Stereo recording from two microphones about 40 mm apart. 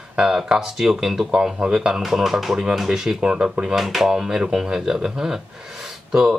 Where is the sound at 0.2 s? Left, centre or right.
Centre.